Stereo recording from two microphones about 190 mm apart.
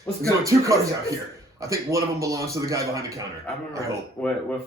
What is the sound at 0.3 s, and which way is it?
Speech, 15° right (ahead or behind).